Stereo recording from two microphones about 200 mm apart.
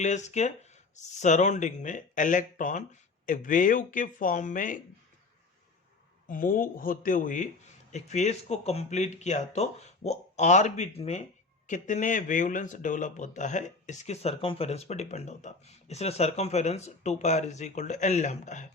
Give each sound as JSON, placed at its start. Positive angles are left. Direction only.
{"t": 0.0, "sound": "speech", "side_deg": 35}
{"t": 6.2, "sound": "speech", "side_deg": 40}